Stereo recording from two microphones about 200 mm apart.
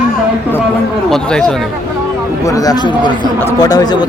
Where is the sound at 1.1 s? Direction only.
5° left (ahead or behind).